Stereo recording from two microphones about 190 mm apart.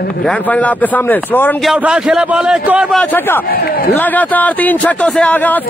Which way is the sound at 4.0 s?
10° left (ahead or behind).